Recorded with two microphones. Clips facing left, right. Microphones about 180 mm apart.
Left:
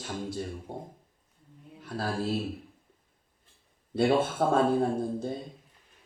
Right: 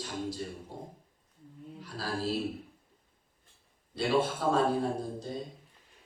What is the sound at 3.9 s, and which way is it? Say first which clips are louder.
Speech: left 4 dB; 55° left (ahead or behind).